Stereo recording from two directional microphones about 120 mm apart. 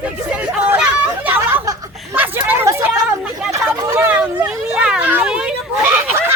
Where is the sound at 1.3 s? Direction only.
15° right (ahead or behind).